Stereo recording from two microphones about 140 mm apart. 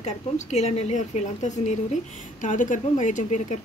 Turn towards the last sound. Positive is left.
turn(degrees=60)  # may be behind; listen again after turning